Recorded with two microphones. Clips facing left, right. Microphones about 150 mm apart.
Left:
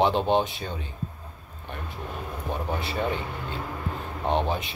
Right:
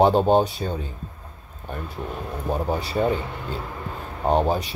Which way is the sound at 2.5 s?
40° right (ahead or behind).